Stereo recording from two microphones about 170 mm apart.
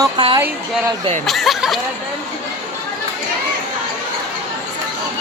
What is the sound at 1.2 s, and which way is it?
Speech, centre (ahead or behind).